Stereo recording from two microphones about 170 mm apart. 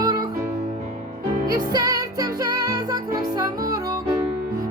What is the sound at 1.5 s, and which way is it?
Music, 25° right (ahead or behind).